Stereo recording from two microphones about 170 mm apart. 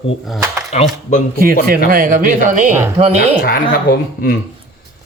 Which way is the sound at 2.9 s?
40° right (ahead or behind).